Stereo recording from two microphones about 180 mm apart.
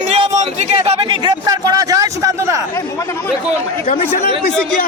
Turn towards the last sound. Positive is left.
turn(degrees=50)  # may be behind; listen again after turning